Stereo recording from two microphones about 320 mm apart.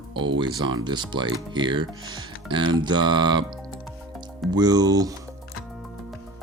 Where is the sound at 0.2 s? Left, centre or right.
Centre.